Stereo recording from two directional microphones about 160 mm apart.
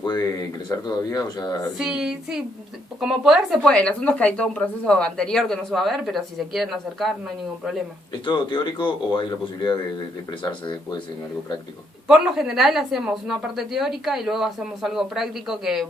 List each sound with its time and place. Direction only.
0.0 s a sound: 25° left (ahead or behind)
0.7 s speech: 25° left (ahead or behind)
1.8 s speech: 5° right (ahead or behind)
8.2 s speech: 30° left (ahead or behind)
12.0 s speech: centre (ahead or behind)